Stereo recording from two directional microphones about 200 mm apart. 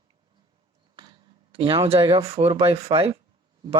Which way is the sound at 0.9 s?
20° right (ahead or behind).